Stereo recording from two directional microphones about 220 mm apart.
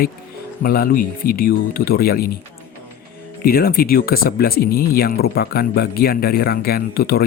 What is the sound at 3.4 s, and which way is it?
Speech, 45° left (ahead or behind).